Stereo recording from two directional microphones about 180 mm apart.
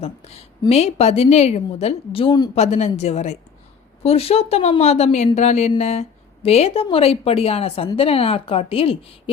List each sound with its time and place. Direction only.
0.0 s speech: 35° left (ahead or behind)
2.6 s speech: 40° left (ahead or behind)